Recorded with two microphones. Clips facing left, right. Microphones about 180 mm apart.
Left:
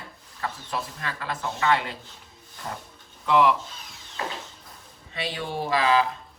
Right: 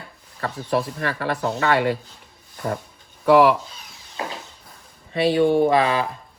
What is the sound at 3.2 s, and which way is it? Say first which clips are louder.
Speech: right 6 dB; 65° right (ahead or behind).